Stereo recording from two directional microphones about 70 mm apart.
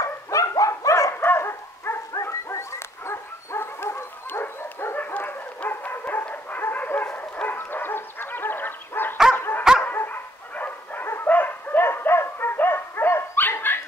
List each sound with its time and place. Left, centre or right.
0.0 s dog: left
1.1 s dog: left
7.1 s bow-wow: left
9.3 s dog: left